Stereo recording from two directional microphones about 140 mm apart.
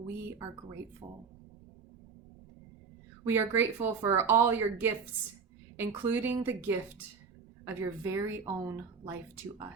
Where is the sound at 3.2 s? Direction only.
15° right (ahead or behind).